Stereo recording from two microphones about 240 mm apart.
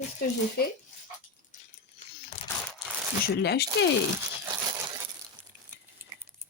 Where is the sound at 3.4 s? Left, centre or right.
Left.